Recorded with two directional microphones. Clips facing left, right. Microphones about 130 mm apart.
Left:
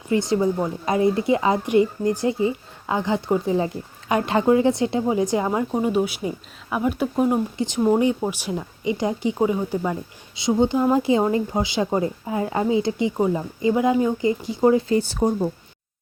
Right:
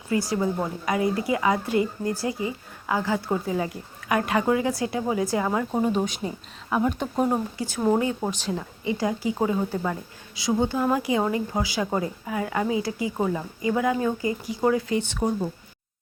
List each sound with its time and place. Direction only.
0.1 s speech: 25° left (ahead or behind)
5.7 s speech: 10° left (ahead or behind)
7.6 s speech: 25° left (ahead or behind)
8.2 s speech: 10° left (ahead or behind)
13.1 s speech: 15° left (ahead or behind); by 15.3 s 35° left (ahead or behind)